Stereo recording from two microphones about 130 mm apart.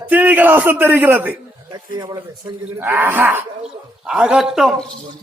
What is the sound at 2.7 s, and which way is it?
Speech, 15° right (ahead or behind).